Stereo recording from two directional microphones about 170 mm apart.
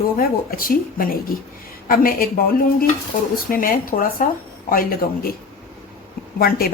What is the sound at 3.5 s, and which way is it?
A woman's voice, 55° left (ahead or behind).